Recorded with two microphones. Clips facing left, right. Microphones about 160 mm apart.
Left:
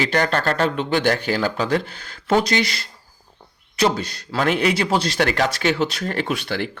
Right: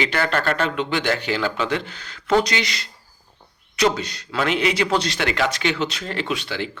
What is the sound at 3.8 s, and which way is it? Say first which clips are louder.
Speech: even; 35° left (ahead or behind).